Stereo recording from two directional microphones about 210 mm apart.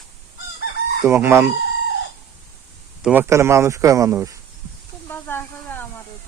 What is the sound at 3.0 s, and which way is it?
Speech, 10° right (ahead or behind).